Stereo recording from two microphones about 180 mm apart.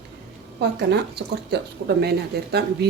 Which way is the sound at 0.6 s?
70° right (ahead or behind).